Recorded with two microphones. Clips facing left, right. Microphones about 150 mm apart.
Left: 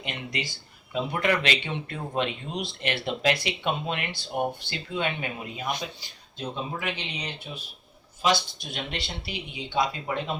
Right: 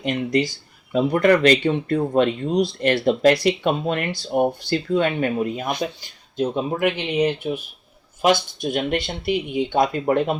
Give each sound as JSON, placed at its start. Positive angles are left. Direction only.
{"t": 0.0, "sound": "speech", "side_deg": -40}
{"t": 6.0, "sound": "speech", "side_deg": -50}